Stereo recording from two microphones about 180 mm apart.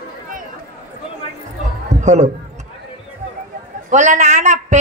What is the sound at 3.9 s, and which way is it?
Speech, 40° right (ahead or behind).